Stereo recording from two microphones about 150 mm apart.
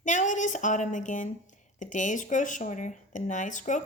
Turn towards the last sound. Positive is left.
turn(degrees=55)  # may be behind; listen again after turning